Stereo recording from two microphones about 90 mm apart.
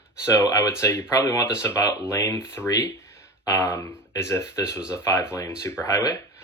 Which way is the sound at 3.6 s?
25° left (ahead or behind).